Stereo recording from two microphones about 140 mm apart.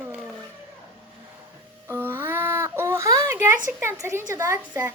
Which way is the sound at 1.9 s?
15° right (ahead or behind).